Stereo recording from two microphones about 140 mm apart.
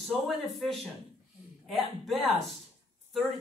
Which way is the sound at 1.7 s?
Centre (ahead or behind).